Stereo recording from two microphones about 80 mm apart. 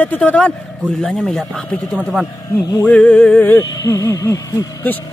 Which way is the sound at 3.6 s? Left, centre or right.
Left.